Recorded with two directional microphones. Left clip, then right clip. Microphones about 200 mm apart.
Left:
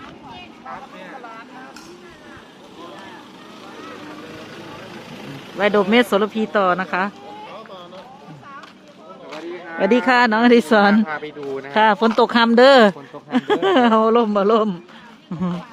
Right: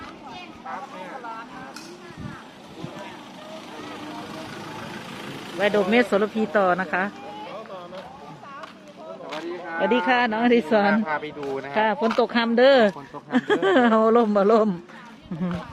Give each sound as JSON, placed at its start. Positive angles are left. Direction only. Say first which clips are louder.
{"t": 5.5, "sound": "speech", "louder": "left 4 dB", "side_deg": 30}
{"t": 9.3, "sound": "a sound", "louder": "left 1 dB", "side_deg": 5}
{"t": 10.1, "sound": "speech", "louder": "left 8 dB", "side_deg": 40}
{"t": 10.9, "sound": "speech", "louder": "left 3 dB", "side_deg": 0}
{"t": 11.7, "sound": "speech", "louder": "left 7 dB", "side_deg": 40}
{"t": 13.3, "sound": "speech", "louder": "left 3 dB", "side_deg": 15}